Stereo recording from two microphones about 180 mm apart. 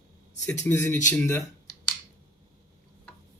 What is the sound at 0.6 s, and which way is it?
Speech, 15° left (ahead or behind).